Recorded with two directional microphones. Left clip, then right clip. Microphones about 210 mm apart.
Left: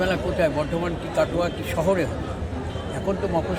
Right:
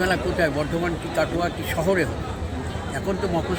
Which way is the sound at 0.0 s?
5° right (ahead or behind).